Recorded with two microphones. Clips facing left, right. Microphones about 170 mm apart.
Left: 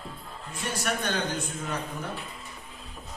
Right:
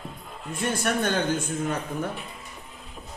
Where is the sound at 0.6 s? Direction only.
50° right (ahead or behind).